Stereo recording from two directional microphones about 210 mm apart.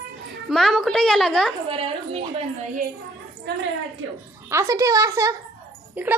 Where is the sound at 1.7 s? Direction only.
25° right (ahead or behind).